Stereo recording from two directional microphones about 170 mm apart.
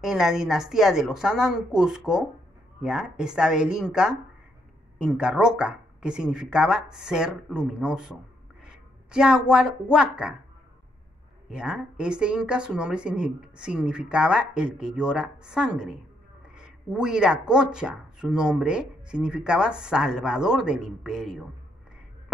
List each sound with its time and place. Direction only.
0.0 s a woman's voice: 5° right (ahead or behind)
11.5 s speech: 5° right (ahead or behind)